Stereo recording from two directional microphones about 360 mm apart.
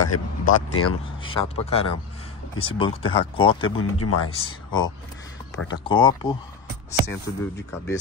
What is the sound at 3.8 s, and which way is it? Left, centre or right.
Speech, left.